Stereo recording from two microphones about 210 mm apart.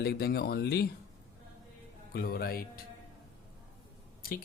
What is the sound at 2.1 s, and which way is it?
Speech, 45° left (ahead or behind).